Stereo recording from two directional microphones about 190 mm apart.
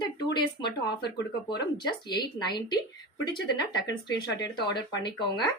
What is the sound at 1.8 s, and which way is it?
A woman's voice, 25° left (ahead or behind).